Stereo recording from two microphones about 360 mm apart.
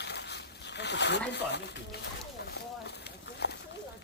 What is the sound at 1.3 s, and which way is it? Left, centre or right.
Speech, left.